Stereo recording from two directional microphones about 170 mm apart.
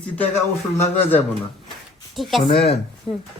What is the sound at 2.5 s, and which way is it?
Speech, 75° left (ahead or behind).